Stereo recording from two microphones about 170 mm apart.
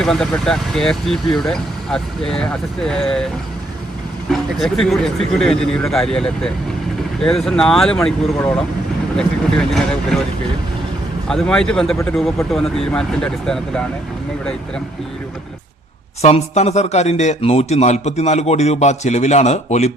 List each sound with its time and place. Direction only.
0.0 s speech: 5° left (ahead or behind)
4.3 s speech: centre (ahead or behind)
11.3 s speech: 5° left (ahead or behind)
16.2 s speech: 40° left (ahead or behind)